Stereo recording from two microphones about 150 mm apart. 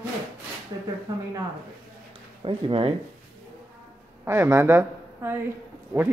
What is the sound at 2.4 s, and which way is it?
Speech, 35° right (ahead or behind).